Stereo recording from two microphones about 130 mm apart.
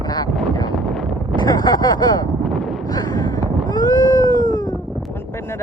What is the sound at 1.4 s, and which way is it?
Speech, 30° left (ahead or behind).